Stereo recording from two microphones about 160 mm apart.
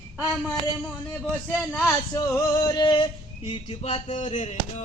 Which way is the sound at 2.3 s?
20° left (ahead or behind).